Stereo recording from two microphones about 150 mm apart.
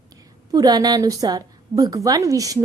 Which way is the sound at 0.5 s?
25° right (ahead or behind).